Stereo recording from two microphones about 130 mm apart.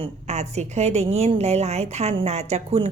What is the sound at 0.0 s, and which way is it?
A woman's voice, 60° right (ahead or behind).